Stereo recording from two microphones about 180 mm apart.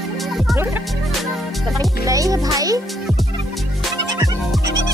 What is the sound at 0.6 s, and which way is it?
Music, 10° right (ahead or behind).